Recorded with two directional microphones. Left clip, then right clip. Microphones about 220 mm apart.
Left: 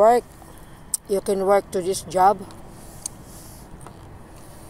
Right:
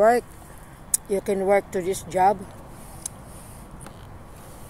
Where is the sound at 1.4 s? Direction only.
40° left (ahead or behind).